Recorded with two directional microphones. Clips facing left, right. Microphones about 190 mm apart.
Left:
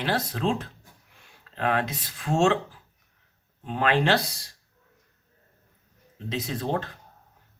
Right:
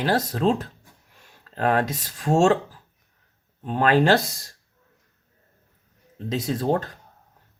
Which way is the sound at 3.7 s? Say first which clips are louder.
Right 5 dB; 40° right (ahead or behind).